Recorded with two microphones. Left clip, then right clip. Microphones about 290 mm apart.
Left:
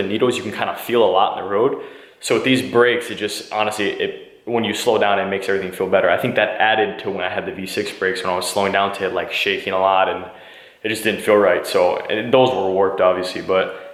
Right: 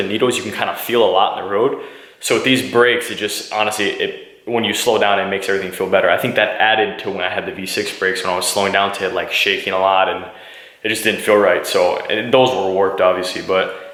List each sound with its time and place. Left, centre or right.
0.0 s speech: centre
12.5 s speech: left
12.8 s speech: centre